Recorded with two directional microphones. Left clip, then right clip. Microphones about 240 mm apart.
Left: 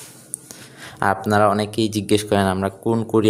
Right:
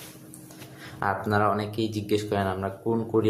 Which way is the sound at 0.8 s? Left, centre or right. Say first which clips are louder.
Left 7 dB; left.